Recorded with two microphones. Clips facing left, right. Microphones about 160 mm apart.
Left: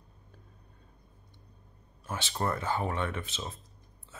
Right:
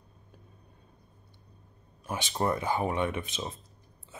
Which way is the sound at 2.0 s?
15° right (ahead or behind).